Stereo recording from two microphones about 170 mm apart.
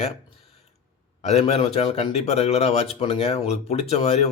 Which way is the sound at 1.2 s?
40° left (ahead or behind).